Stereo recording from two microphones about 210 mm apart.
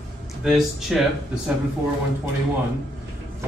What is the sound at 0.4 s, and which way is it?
Speech, centre (ahead or behind).